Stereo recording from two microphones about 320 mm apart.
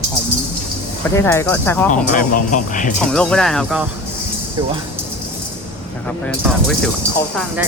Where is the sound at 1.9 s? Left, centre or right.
Left.